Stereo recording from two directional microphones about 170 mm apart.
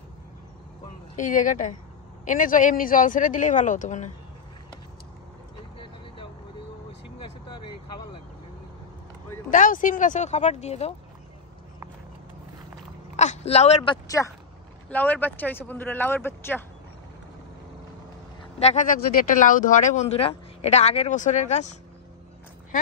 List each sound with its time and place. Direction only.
1.1 s speech: 50° left (ahead or behind)
7.2 s vehicle: 30° left (ahead or behind)
9.5 s speech: 50° left (ahead or behind)
13.1 s speech: 40° left (ahead or behind)
14.0 s speech: 20° left (ahead or behind)
18.6 s speech: 45° left (ahead or behind)